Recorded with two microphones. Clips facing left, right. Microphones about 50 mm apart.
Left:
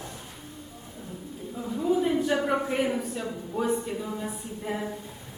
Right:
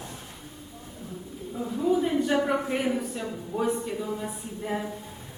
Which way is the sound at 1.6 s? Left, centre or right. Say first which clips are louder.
Even; centre.